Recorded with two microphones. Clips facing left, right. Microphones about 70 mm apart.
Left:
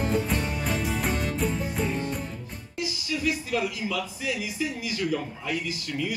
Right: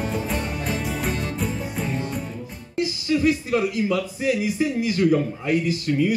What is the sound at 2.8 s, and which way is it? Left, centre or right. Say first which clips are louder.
Speech: right 9 dB; right.